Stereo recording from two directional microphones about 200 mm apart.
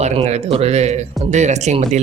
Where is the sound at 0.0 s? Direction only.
35° right (ahead or behind).